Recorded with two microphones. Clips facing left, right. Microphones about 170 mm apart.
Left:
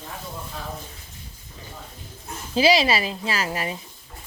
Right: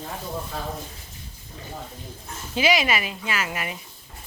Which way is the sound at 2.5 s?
35° left (ahead or behind).